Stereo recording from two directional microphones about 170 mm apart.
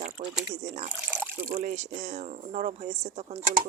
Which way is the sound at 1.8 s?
45° right (ahead or behind).